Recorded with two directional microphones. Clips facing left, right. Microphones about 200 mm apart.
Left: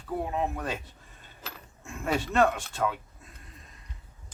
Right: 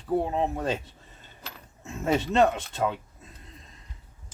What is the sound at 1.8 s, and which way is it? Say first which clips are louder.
Speech: right 4 dB; 20° right (ahead or behind).